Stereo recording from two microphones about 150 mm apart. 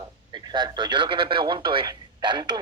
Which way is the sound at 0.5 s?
30° right (ahead or behind).